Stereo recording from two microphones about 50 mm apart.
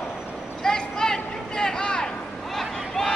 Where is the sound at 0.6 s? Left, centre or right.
Centre.